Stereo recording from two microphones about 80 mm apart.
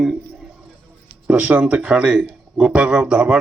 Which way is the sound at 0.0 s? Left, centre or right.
Centre.